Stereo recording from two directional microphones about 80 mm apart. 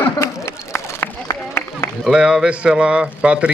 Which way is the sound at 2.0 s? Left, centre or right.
Centre.